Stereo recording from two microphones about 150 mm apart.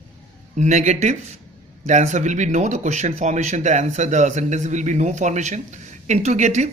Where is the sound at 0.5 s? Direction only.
55° right (ahead or behind).